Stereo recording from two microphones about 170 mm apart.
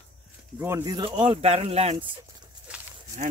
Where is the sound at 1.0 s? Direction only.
30° right (ahead or behind).